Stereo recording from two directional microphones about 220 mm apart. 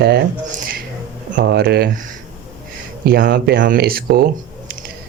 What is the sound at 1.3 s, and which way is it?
Speech, 50° right (ahead or behind).